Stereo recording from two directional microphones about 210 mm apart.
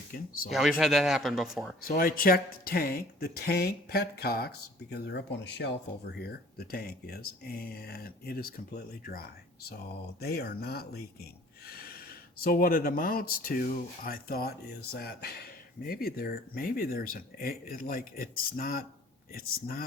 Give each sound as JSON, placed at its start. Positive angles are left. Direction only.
{"t": 0.5, "sound": "speech", "side_deg": 0}
{"t": 1.8, "sound": "speech", "side_deg": 45}